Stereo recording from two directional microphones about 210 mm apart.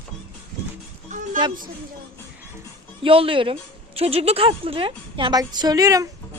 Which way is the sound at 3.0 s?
25° right (ahead or behind).